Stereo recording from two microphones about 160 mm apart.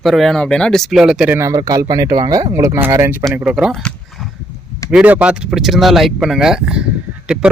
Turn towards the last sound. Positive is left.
turn(degrees=-5)  # may be behind; listen again after turning